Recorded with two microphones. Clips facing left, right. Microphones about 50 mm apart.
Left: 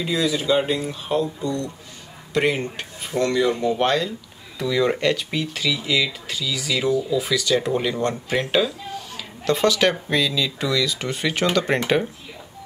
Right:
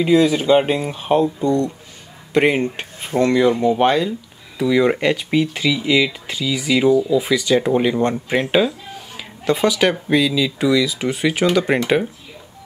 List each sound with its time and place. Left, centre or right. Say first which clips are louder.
0.0 s speech: right 8 dB; right; by 11.8 s centre